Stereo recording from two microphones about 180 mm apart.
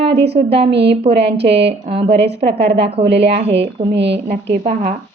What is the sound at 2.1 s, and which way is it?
Speech, 70° right (ahead or behind).